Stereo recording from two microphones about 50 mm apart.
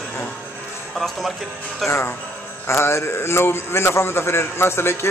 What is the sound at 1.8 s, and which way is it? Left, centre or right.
A man's voice, left.